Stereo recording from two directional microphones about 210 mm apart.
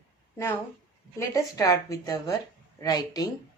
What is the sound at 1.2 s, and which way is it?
A woman's voice, 15° left (ahead or behind).